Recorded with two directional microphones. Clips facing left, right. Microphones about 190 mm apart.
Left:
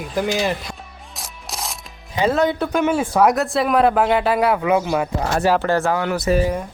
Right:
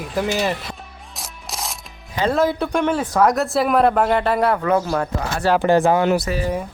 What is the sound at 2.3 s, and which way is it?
Speech, centre (ahead or behind).